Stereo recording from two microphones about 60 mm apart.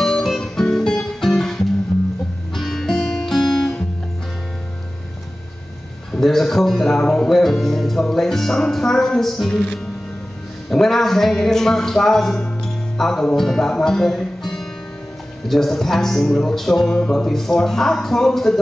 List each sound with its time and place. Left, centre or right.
0.0 s music: centre
6.1 s music: centre
10.7 s speech: centre
12.4 s music: centre
13.4 s speech: centre
15.4 s music: centre